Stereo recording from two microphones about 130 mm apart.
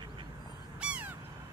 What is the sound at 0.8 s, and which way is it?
Crow, 10° right (ahead or behind).